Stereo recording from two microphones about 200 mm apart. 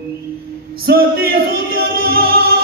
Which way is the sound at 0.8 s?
50° right (ahead or behind).